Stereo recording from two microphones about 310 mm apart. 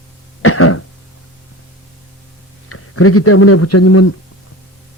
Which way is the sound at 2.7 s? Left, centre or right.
Left.